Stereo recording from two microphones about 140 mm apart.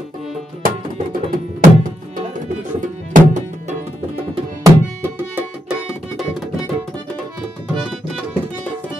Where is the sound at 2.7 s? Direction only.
65° right (ahead or behind).